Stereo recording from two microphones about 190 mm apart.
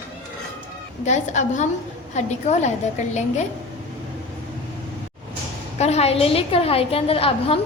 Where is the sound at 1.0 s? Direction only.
40° left (ahead or behind).